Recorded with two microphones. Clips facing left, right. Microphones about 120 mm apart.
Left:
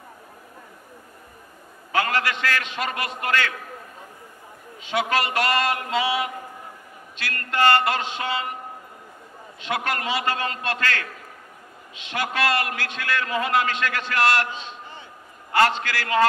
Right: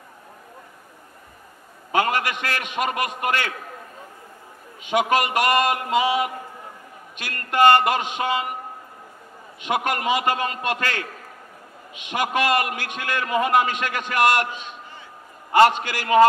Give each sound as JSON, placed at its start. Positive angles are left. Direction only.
{"t": 1.9, "sound": "a man's voice", "side_deg": -15}
{"t": 4.8, "sound": "a man's voice", "side_deg": -15}
{"t": 9.6, "sound": "a man's voice", "side_deg": -15}
{"t": 12.1, "sound": "a man's voice", "side_deg": -15}